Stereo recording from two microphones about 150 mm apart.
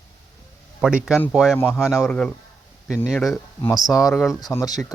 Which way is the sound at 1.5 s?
15° left (ahead or behind).